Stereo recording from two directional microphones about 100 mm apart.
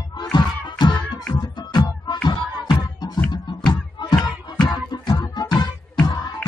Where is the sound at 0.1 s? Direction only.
45° left (ahead or behind).